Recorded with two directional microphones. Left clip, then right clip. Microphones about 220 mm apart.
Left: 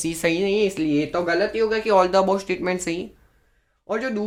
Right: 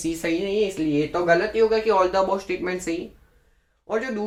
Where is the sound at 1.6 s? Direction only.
50° left (ahead or behind).